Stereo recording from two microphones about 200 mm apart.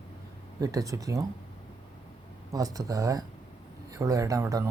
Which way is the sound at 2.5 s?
15° right (ahead or behind).